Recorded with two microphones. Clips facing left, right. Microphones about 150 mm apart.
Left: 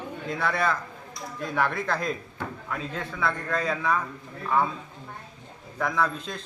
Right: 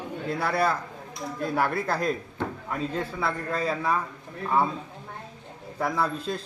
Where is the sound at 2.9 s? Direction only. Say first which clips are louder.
Left 2 dB; 35° right (ahead or behind).